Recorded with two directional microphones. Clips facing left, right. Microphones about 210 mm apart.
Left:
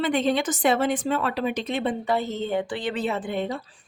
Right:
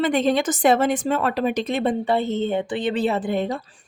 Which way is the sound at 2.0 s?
30° right (ahead or behind).